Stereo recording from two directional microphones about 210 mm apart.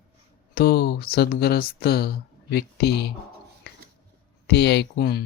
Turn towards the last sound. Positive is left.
turn(degrees=50)  # may be behind; listen again after turning